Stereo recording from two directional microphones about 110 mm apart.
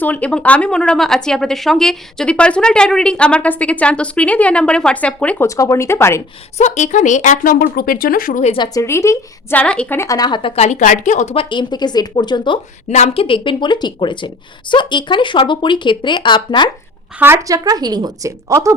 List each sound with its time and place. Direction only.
0.0 s speech: 15° left (ahead or behind)
5.4 s speech: 30° left (ahead or behind)
6.6 s a woman's voice: 90° left
8.5 s speech: 40° left (ahead or behind)
8.8 s speech: 25° left (ahead or behind)
9.6 s speech: 10° left (ahead or behind)
10.0 s speech: 35° left (ahead or behind)
10.5 s speech: 85° left
11.4 s speech: 45° left (ahead or behind)
12.9 s a woman's voice: 90° left
13.2 s a woman's voice: 50° left (ahead or behind)
17.2 s a woman's voice: 20° right (ahead or behind)